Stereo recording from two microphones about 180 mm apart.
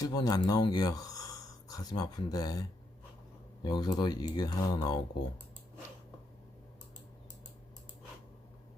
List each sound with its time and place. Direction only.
0.0 s speech: 20° left (ahead or behind)